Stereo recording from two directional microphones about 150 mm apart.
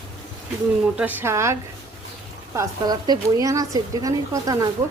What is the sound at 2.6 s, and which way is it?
Speech, 25° right (ahead or behind).